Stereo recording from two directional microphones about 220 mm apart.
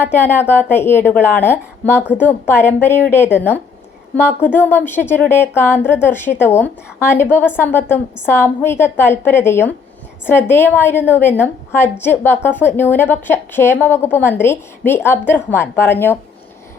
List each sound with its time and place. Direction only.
0.0 s a woman's voice: 10° left (ahead or behind)